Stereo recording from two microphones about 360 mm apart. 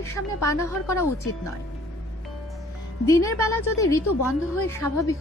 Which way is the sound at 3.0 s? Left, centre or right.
Centre.